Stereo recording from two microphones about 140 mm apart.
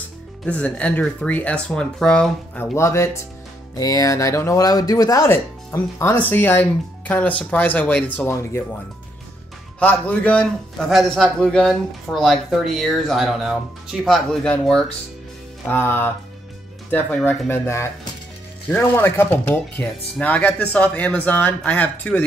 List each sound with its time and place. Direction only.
0.5 s speech: 10° left (ahead or behind)
2.6 s speech: 20° left (ahead or behind)
9.8 s a man's voice: 10° left (ahead or behind)